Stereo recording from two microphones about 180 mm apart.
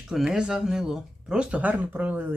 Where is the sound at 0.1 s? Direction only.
5° right (ahead or behind).